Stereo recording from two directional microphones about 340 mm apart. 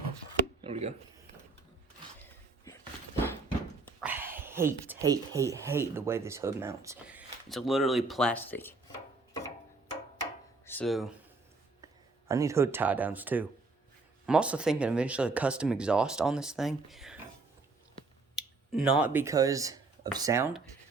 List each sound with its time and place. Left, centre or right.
0.6 s a sound: centre
4.0 s speech: centre
10.7 s speech: centre
12.3 s speech: centre
18.3 s speech: centre